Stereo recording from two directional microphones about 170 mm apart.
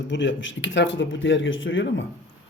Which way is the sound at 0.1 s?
90° left.